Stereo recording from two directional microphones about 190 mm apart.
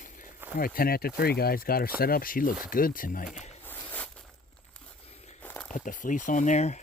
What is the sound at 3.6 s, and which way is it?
Zipper, 10° left (ahead or behind).